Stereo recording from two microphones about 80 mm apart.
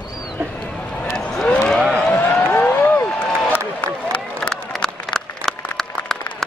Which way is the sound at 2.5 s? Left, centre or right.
Left.